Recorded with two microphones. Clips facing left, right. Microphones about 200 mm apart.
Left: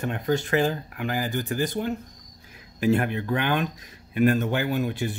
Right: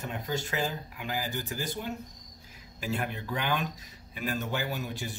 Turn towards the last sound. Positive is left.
turn(degrees=55)  # may be behind; listen again after turning